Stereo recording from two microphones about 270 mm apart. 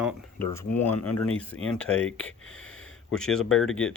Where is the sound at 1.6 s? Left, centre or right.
Centre.